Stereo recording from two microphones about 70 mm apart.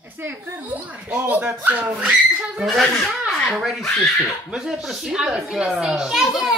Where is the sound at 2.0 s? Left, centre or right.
Centre.